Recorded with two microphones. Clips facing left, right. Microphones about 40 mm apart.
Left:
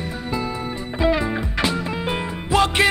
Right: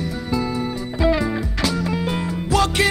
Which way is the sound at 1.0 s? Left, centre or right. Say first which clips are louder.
Right 1 dB; left.